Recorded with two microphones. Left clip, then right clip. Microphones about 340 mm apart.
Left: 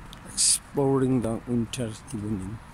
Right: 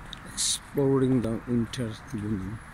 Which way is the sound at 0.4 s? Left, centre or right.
Centre.